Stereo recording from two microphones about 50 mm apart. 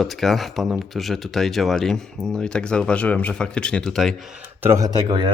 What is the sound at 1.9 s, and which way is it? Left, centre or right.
Speech, centre.